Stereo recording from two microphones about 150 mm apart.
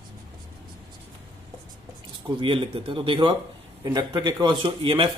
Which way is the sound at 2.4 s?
35° right (ahead or behind).